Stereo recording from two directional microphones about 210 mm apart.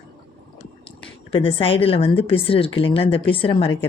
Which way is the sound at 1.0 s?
25° left (ahead or behind).